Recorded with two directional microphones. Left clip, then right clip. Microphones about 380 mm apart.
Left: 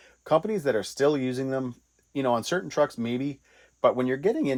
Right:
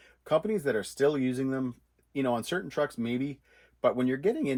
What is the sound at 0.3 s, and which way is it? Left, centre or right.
Speech, centre.